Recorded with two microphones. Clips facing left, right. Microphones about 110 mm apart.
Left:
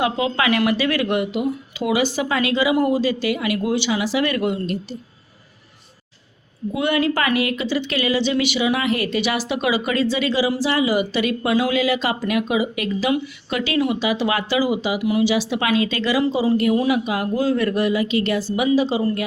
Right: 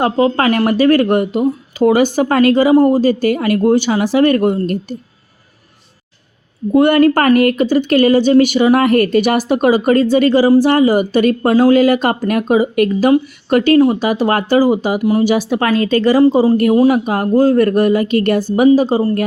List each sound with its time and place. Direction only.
0.0 s speech: 45° right (ahead or behind)
6.7 s speech: 50° right (ahead or behind)